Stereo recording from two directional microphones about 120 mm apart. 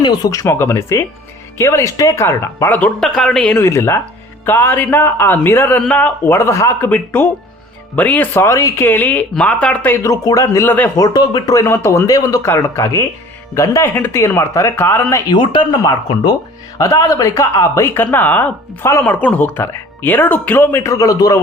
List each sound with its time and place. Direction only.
0.0 s speech: 35° left (ahead or behind); by 2.9 s 15° left (ahead or behind)
3.0 s speech: 5° left (ahead or behind)
3.6 s speech: 20° left (ahead or behind)
10.0 s speech: 30° left (ahead or behind)
10.9 s speech: 35° left (ahead or behind)
15.4 s speech: 40° left (ahead or behind)